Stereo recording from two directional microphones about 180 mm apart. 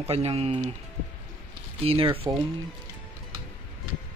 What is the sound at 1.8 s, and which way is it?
Speech, 30° right (ahead or behind).